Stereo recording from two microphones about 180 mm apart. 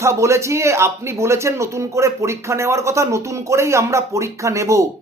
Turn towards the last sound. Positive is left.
turn(degrees=-15)  # may be behind; listen again after turning